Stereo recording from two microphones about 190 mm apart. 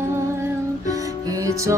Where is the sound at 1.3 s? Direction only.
15° right (ahead or behind).